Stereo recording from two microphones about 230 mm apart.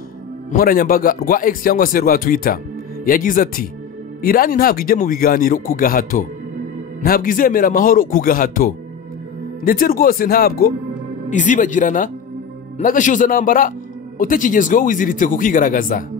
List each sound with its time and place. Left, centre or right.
0.5 s speech: left